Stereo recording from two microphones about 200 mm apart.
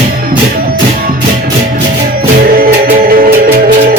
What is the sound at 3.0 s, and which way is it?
Music, 45° right (ahead or behind).